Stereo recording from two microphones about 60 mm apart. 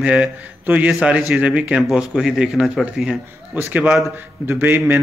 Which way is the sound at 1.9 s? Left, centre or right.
Centre.